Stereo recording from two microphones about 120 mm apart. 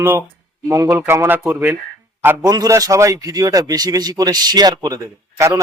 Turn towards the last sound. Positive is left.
turn(degrees=-30)  # may be behind; listen again after turning